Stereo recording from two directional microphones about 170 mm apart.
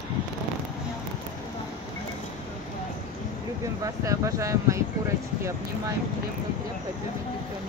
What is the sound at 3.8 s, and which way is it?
Speech, 20° right (ahead or behind).